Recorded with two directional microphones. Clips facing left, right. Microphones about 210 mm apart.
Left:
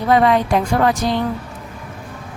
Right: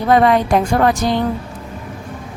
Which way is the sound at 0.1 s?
50° right (ahead or behind).